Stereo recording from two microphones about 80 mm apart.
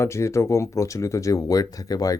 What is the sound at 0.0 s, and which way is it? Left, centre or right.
Speech, left.